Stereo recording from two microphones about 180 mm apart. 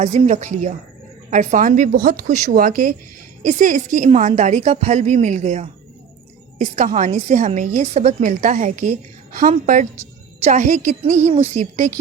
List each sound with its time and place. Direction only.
0.0 s a woman's voice: 40° right (ahead or behind)